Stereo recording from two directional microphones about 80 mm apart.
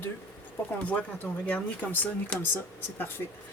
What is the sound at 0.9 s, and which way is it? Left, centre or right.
Speech, centre.